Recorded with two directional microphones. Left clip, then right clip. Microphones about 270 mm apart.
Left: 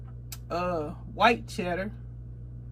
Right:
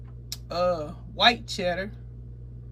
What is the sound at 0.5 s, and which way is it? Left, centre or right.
Speech, centre.